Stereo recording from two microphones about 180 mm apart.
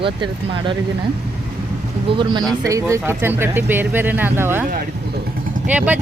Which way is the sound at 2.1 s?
25° right (ahead or behind).